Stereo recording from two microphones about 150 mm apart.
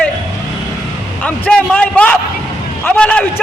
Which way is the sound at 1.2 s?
10° left (ahead or behind).